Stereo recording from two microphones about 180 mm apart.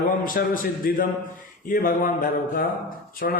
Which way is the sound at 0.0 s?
50° left (ahead or behind).